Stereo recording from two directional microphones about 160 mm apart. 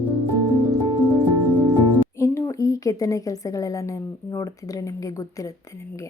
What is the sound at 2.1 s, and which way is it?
A woman's voice, 20° left (ahead or behind).